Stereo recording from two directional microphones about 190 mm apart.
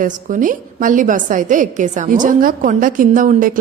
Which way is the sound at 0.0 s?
45° right (ahead or behind).